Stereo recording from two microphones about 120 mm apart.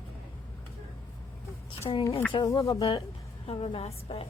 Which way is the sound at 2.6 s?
30° left (ahead or behind).